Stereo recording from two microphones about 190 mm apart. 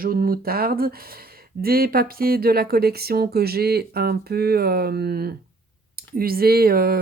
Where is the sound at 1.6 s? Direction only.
50° right (ahead or behind).